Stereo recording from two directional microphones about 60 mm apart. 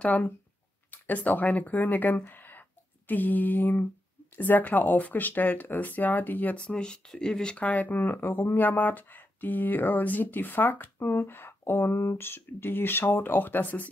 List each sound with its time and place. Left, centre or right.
0.0 s speech: left
6.5 s speech: centre
7.6 s speech: left